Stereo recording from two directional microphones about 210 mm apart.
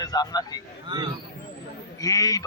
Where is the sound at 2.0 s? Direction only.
15° left (ahead or behind).